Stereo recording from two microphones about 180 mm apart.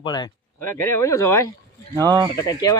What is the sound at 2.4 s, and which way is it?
Speech, 20° left (ahead or behind).